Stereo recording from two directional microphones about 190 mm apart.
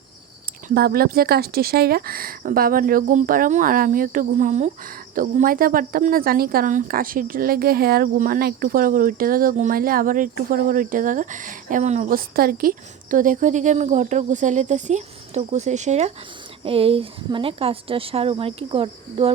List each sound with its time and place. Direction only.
0.7 s a woman's voice: 55° right (ahead or behind); by 19.3 s 30° right (ahead or behind)